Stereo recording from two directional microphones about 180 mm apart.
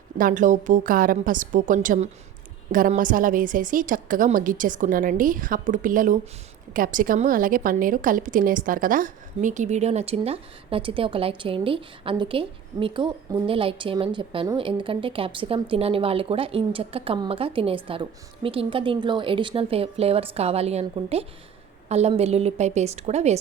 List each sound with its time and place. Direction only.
0.2 s a woman's voice: 45° right (ahead or behind)